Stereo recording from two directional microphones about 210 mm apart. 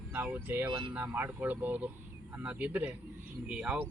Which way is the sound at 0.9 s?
5° right (ahead or behind).